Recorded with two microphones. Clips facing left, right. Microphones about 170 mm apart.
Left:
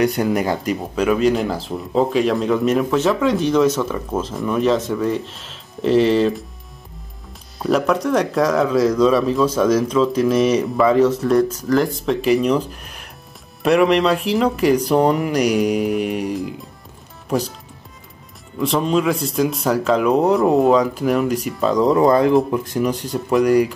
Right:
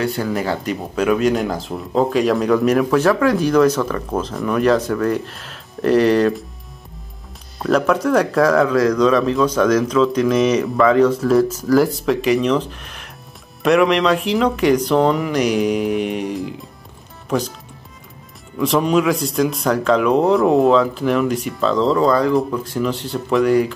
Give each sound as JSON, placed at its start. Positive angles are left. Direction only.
{"t": 0.0, "sound": "speech", "side_deg": 15}
{"t": 0.7, "sound": "speech", "side_deg": 0}
{"t": 7.5, "sound": "speech", "side_deg": 0}
{"t": 18.6, "sound": "speech", "side_deg": 0}
{"t": 23.1, "sound": "speech", "side_deg": 0}